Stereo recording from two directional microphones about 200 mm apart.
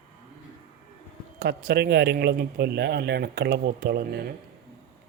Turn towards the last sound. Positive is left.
turn(degrees=-50)  # may be behind; listen again after turning